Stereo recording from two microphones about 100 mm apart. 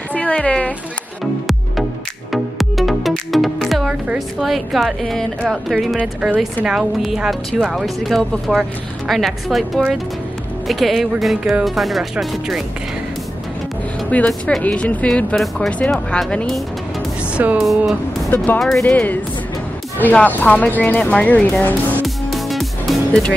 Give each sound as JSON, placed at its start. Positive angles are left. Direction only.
{"t": 0.1, "sound": "a woman's voice", "side_deg": 15}
{"t": 1.2, "sound": "music", "side_deg": 0}
{"t": 4.4, "sound": "speech", "side_deg": 0}
{"t": 5.9, "sound": "speech", "side_deg": -10}
{"t": 14.1, "sound": "speech", "side_deg": 10}
{"t": 18.3, "sound": "speech", "side_deg": 20}
{"t": 22.0, "sound": "music", "side_deg": 0}